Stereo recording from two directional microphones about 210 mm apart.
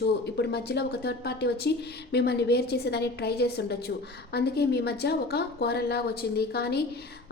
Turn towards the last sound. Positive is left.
turn(degrees=50)  # may be behind; listen again after turning